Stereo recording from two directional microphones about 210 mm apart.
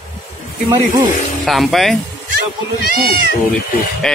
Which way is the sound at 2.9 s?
45° right (ahead or behind).